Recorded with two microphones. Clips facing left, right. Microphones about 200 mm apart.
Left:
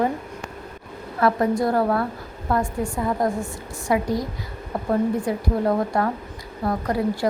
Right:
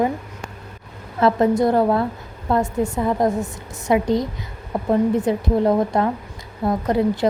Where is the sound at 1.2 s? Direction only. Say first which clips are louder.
Right 4 dB; 20° right (ahead or behind).